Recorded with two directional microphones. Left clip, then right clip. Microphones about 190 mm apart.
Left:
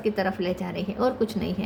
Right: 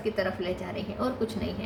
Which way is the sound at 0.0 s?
55° left (ahead or behind).